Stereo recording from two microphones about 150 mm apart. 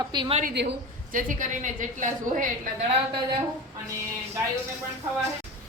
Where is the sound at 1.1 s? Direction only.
60° right (ahead or behind).